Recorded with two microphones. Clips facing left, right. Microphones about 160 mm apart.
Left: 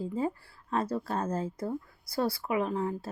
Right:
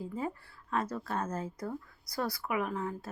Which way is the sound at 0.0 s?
30° left (ahead or behind).